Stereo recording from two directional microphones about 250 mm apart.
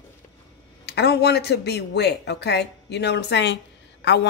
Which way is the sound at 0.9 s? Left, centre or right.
Left.